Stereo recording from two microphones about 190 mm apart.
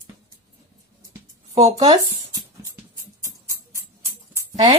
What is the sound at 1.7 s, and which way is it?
Speech, 20° right (ahead or behind).